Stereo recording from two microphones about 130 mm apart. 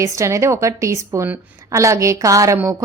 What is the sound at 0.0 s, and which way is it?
A woman's voice, 25° right (ahead or behind).